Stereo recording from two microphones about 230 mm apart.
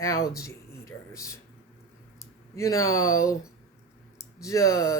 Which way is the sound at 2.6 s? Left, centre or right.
Centre.